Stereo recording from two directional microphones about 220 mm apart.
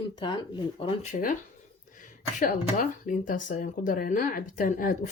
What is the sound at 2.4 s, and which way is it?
Speech, 35° left (ahead or behind).